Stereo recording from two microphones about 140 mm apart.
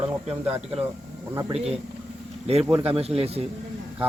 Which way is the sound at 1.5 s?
45° right (ahead or behind).